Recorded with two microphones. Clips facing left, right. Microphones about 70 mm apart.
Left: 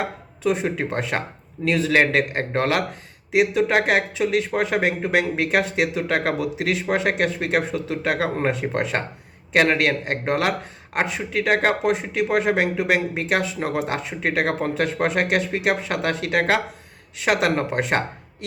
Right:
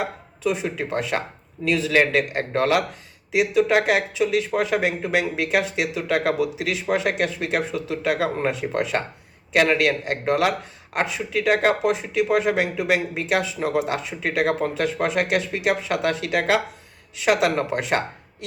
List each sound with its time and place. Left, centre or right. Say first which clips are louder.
0.0 s speech: left 1 dB; left